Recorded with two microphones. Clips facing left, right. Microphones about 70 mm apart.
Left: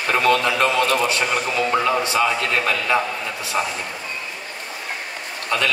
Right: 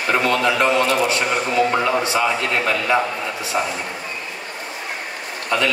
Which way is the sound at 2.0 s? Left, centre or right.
Right.